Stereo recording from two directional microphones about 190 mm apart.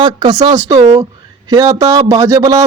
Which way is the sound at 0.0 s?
20° right (ahead or behind).